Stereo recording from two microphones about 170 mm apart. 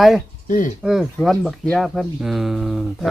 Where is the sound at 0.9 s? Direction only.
Centre (ahead or behind).